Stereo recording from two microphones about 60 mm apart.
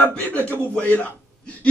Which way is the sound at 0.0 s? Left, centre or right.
Left.